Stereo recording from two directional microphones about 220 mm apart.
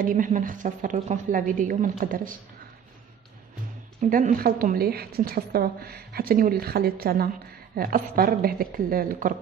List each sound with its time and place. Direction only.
0.0 s a woman's voice: 35° right (ahead or behind)
4.0 s a woman's voice: 35° right (ahead or behind)